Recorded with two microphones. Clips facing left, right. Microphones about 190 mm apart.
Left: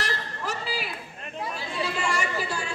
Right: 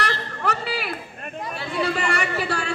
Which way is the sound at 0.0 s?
65° right (ahead or behind).